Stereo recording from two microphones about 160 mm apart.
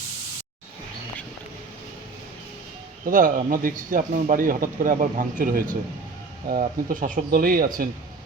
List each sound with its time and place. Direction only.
3.1 s a man's voice: 55° right (ahead or behind)
7.3 s a man's voice: 65° right (ahead or behind)